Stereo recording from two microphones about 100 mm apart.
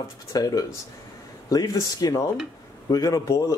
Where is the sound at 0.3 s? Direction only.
40° left (ahead or behind).